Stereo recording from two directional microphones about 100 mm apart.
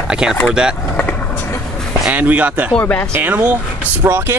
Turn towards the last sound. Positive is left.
turn(degrees=-20)  # may be behind; listen again after turning